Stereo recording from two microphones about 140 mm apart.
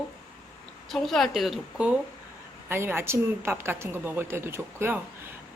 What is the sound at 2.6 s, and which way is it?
A woman's voice, 15° right (ahead or behind).